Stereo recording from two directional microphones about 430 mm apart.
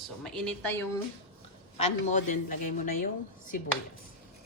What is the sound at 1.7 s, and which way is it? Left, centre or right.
A woman's voice, centre.